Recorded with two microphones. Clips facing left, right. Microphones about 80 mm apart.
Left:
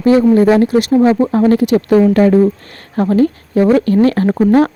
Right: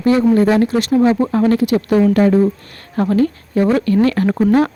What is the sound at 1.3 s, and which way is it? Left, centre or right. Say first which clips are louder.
Speech: left 3 dB; left.